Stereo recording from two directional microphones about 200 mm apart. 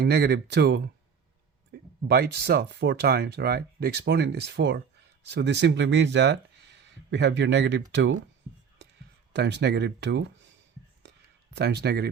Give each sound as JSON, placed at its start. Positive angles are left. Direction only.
{"t": 0.0, "sound": "speech", "side_deg": -55}
{"t": 1.7, "sound": "a sound", "side_deg": -55}
{"t": 2.0, "sound": "speech", "side_deg": -55}
{"t": 9.3, "sound": "speech", "side_deg": -60}
{"t": 11.5, "sound": "speech", "side_deg": -55}